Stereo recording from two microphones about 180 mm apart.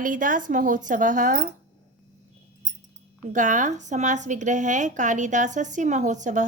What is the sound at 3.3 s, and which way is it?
A woman's voice, 45° right (ahead or behind).